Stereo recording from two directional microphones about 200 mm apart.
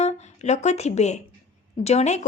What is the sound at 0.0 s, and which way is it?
Speech, 35° left (ahead or behind).